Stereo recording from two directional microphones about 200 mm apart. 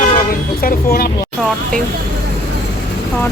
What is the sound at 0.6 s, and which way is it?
Speech, 45° left (ahead or behind).